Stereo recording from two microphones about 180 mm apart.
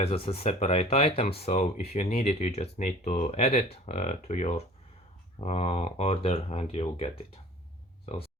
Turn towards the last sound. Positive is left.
turn(degrees=35)  # may be behind; listen again after turning